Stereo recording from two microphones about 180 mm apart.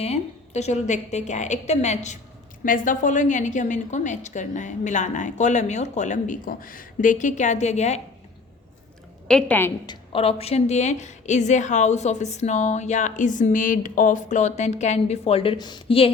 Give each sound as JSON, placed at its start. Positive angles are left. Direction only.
{"t": 0.0, "sound": "a woman's voice", "side_deg": 35}
{"t": 9.2, "sound": "a woman's voice", "side_deg": 5}
{"t": 9.8, "sound": "a woman's voice", "side_deg": 25}